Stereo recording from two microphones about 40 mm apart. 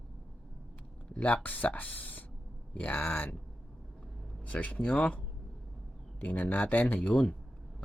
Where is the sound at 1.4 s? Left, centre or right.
Left.